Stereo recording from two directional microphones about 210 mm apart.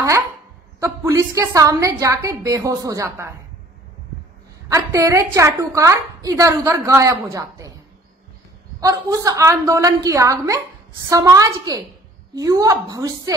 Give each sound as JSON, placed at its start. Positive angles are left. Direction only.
{"t": 0.7, "sound": "a woman's voice", "side_deg": -15}
{"t": 4.6, "sound": "a woman's voice", "side_deg": -15}
{"t": 8.8, "sound": "a woman's voice", "side_deg": -15}